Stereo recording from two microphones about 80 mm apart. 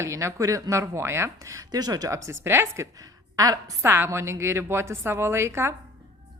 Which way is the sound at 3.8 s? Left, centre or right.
Right.